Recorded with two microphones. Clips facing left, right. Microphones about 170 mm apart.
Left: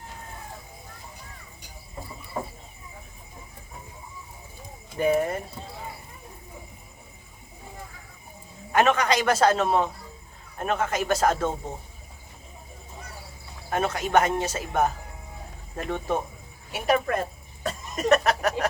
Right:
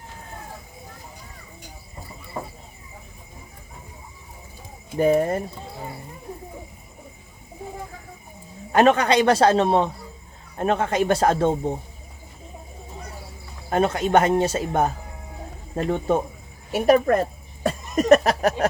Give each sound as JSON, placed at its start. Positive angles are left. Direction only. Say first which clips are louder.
{"t": 4.9, "sound": "speech", "louder": "right 4 dB", "side_deg": -35}
{"t": 8.7, "sound": "speech", "louder": "right 5 dB", "side_deg": -35}
{"t": 13.7, "sound": "speech", "louder": "right 6 dB", "side_deg": -30}
{"t": 16.7, "sound": "speech", "louder": "right 7 dB", "side_deg": -45}
{"t": 17.6, "sound": "a sound", "louder": "right 6 dB", "side_deg": -40}